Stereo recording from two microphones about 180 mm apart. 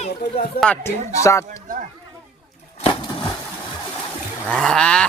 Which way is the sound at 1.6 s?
45° right (ahead or behind).